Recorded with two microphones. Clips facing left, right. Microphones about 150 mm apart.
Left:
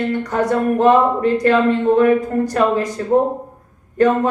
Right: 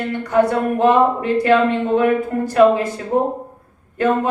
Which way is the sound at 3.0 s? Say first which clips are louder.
Left 3 dB; 40° left (ahead or behind).